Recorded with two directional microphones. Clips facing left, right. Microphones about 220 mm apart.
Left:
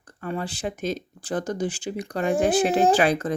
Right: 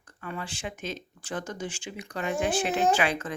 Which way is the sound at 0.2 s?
40° left (ahead or behind).